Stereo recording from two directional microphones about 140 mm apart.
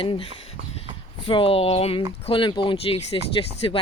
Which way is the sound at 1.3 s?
40° left (ahead or behind).